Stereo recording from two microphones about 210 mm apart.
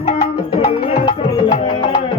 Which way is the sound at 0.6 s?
25° left (ahead or behind).